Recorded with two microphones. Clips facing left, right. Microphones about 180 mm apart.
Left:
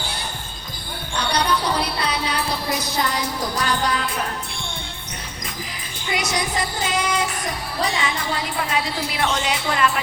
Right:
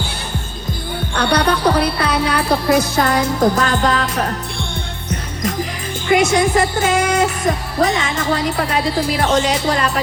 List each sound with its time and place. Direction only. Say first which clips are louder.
1.1 s music: right 5 dB; 60° right (ahead or behind)
3.0 s speech: right 9 dB; 50° right (ahead or behind)
6.1 s speech: right 10 dB; 50° right (ahead or behind)